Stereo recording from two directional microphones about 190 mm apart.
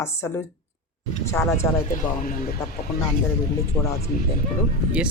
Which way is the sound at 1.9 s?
45° left (ahead or behind).